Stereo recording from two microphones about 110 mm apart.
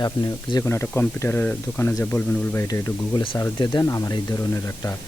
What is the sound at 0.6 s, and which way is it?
Speech, 20° left (ahead or behind).